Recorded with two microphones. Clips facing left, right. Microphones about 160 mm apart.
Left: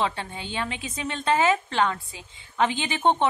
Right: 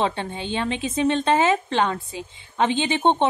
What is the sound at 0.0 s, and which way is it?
A woman's voice, 25° right (ahead or behind).